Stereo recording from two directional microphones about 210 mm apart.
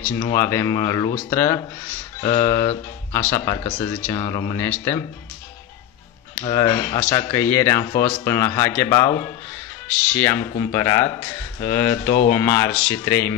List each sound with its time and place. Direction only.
0.0 s speech: 10° left (ahead or behind)
6.4 s speech: 15° left (ahead or behind)